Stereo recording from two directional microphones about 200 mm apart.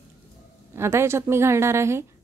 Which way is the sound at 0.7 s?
15° right (ahead or behind).